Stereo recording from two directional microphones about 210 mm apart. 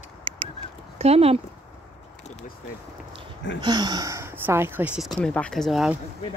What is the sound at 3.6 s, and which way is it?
Speech, 20° right (ahead or behind).